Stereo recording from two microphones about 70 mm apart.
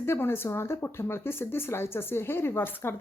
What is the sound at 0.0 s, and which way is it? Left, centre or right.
Speech, left.